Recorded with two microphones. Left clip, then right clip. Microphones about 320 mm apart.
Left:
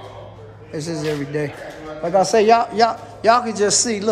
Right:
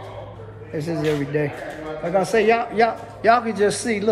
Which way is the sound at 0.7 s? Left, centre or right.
Centre.